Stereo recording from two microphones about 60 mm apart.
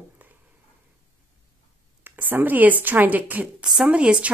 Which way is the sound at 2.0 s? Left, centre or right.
Right.